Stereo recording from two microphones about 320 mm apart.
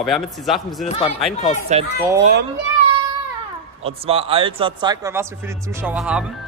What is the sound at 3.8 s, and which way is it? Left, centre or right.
Speech, centre.